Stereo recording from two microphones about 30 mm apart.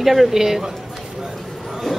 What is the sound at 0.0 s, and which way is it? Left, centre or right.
Speech, centre.